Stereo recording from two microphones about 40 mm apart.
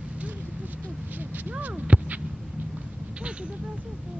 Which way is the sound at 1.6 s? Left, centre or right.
Right.